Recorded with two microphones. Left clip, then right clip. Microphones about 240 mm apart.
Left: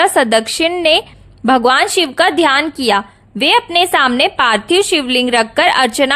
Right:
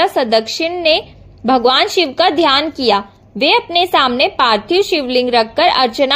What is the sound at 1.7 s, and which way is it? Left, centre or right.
A woman's voice, left.